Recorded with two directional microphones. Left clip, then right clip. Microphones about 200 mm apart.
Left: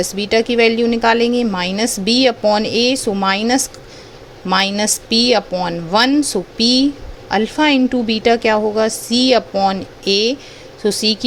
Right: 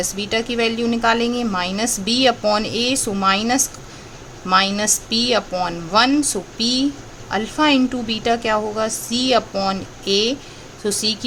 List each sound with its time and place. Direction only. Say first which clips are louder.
0.0 s speech: left 6 dB; 20° left (ahead or behind)